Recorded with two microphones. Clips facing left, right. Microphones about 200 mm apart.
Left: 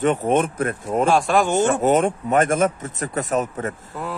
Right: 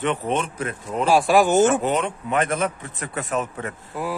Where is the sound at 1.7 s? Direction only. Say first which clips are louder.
Left 4 dB; 45° left (ahead or behind).